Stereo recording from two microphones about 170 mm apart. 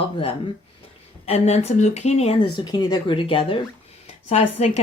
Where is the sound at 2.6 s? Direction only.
25° left (ahead or behind).